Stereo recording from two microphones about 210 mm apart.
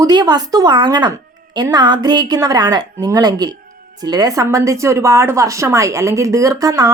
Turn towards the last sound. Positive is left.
turn(degrees=-15)  # may be behind; listen again after turning